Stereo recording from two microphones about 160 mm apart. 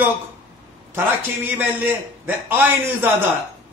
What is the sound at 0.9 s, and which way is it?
A man's voice, 10° right (ahead or behind).